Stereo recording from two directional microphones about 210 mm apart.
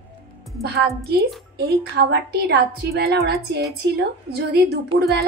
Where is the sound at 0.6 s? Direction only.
50° right (ahead or behind).